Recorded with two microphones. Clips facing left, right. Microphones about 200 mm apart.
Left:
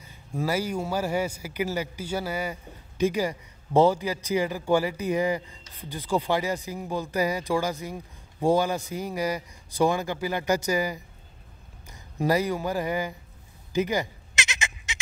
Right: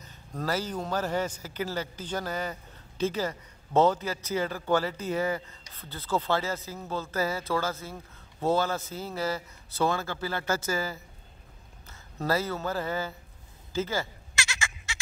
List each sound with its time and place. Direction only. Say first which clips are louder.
0.0 s a man's voice: left 4 dB; 10° left (ahead or behind)
13.7 s bleat: left 5 dB; 15° left (ahead or behind)